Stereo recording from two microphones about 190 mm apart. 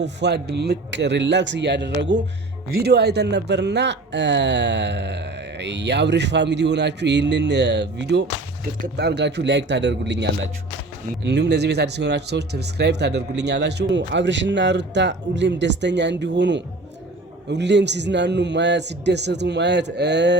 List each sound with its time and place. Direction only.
0.2 s speech: 60° right (ahead or behind)